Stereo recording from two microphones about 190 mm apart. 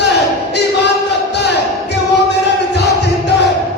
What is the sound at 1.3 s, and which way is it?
Music, 65° left (ahead or behind).